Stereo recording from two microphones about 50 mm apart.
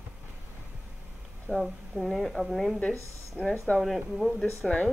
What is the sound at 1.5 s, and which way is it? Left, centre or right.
A woman's voice, centre.